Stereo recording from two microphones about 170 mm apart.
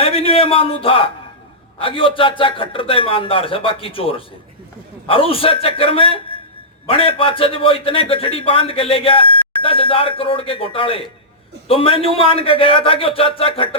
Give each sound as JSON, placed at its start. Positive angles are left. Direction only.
{"t": 0.0, "sound": "a man's voice", "side_deg": 35}